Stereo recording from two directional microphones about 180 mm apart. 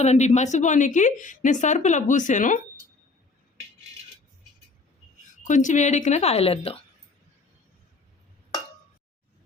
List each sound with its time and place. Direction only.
0.0 s a woman's voice: 40° left (ahead or behind)
5.4 s a woman's voice: 45° left (ahead or behind)